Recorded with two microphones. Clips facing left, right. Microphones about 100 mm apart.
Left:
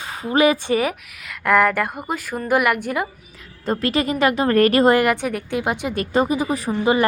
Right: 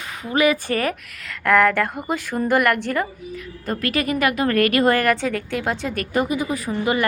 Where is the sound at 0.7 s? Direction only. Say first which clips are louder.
Left 2 dB; 10° left (ahead or behind).